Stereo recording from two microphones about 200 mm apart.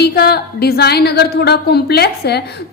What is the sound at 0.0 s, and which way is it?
A woman's voice, 50° left (ahead or behind).